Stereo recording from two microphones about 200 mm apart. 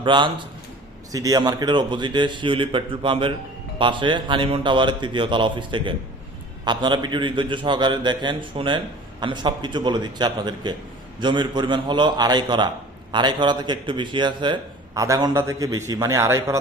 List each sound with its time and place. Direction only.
0.0 s a man's voice: 25° right (ahead or behind)